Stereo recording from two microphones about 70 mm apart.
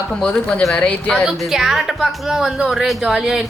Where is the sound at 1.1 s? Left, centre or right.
Centre.